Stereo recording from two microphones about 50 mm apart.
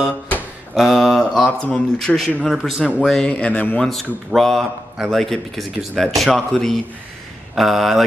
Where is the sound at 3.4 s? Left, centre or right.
Left.